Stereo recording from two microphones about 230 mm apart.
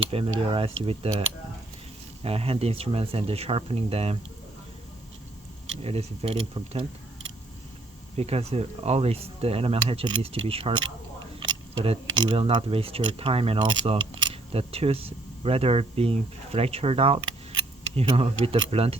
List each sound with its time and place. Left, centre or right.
0.3 s speech: right
2.2 s speech: right
5.8 s speech: right
8.1 s speech: right